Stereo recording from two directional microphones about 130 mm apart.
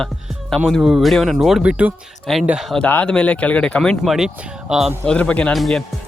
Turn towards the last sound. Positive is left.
turn(degrees=0)  # may be behind; listen again after turning